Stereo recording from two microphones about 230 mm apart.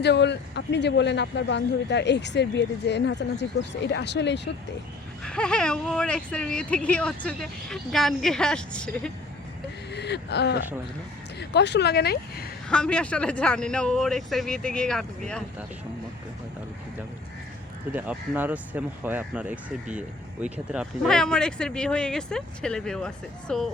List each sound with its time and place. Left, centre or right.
0.0 s speech: left
5.2 s speech: centre
9.9 s gasp: left
11.3 s speech: left
12.6 s speech: centre
17.9 s speech: centre